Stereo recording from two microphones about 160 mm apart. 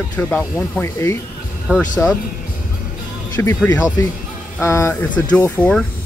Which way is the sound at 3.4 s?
15° left (ahead or behind).